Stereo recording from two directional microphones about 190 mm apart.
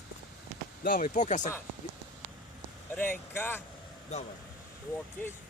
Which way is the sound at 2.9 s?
10° left (ahead or behind).